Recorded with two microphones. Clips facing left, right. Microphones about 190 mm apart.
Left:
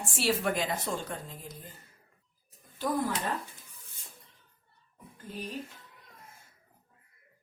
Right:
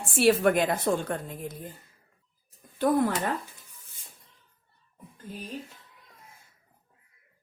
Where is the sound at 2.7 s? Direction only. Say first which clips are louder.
Right 7 dB; 55° right (ahead or behind).